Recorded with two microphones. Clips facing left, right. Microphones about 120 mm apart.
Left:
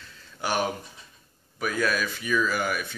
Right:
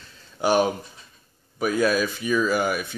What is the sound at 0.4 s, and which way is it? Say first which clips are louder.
Speech: right 7 dB; 20° right (ahead or behind).